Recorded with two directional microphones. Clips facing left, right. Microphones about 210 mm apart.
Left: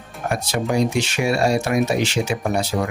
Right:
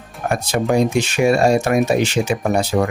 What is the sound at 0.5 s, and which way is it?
Speech, 50° right (ahead or behind).